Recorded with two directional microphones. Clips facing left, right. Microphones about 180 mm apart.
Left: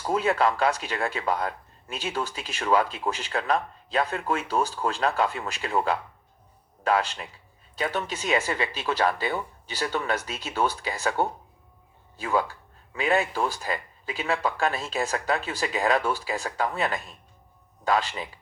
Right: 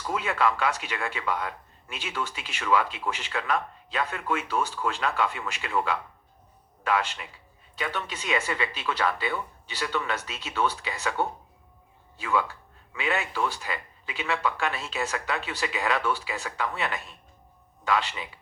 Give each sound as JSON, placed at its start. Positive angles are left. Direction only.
{"t": 0.0, "sound": "speech", "side_deg": 40}